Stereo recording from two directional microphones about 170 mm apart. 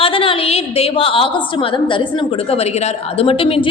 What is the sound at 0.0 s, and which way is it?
A woman's voice, 30° left (ahead or behind).